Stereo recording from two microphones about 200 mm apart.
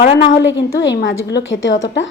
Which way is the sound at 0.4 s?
65° left (ahead or behind).